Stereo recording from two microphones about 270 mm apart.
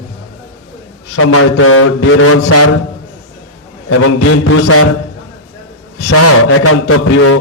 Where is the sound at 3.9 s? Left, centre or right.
Left.